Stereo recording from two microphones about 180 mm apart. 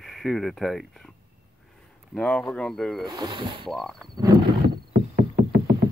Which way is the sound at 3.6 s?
Centre (ahead or behind).